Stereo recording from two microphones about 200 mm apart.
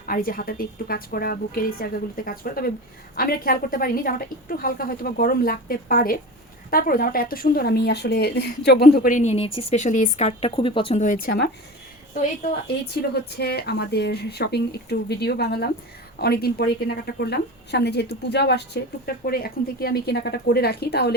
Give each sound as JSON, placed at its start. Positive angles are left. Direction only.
{"t": 0.0, "sound": "speech", "side_deg": 45}
{"t": 11.0, "sound": "speech", "side_deg": 40}
{"t": 13.3, "sound": "speech", "side_deg": 55}